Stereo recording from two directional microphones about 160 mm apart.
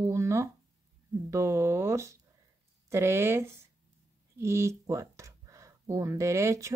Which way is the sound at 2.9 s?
15° right (ahead or behind).